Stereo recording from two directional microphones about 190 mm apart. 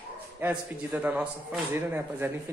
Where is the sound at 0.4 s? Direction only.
10° right (ahead or behind).